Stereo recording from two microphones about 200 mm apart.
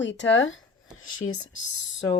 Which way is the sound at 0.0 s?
65° left (ahead or behind).